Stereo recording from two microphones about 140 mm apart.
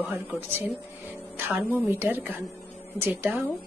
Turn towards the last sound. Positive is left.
turn(degrees=-15)  # may be behind; listen again after turning